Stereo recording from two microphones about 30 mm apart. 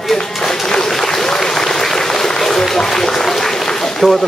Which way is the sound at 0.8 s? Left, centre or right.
Centre.